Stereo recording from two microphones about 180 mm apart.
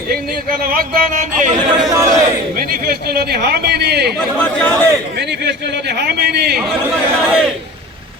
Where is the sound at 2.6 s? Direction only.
55° right (ahead or behind).